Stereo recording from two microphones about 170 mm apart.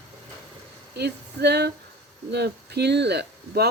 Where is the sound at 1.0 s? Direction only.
75° right (ahead or behind).